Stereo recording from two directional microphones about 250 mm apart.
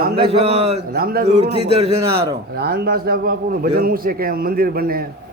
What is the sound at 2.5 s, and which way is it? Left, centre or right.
Speech, right.